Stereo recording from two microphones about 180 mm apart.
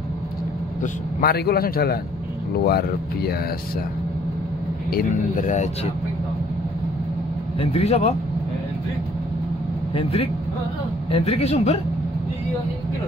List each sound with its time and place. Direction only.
1.2 s speech: 60° left (ahead or behind)
4.9 s a man's voice: 45° left (ahead or behind)
7.6 s a man's voice: 35° left (ahead or behind)
9.9 s a man's voice: 30° left (ahead or behind)